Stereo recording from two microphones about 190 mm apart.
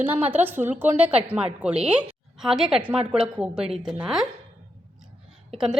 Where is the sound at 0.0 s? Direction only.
5° right (ahead or behind).